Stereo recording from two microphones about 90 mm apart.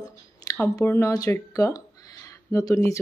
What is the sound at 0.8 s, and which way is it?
Speech, 30° left (ahead or behind).